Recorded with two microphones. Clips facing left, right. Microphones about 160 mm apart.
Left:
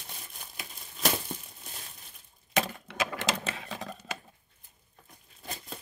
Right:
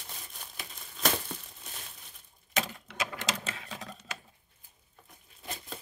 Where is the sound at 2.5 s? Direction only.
55° left (ahead or behind).